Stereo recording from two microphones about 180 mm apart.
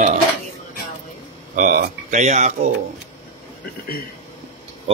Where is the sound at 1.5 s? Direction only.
45° right (ahead or behind).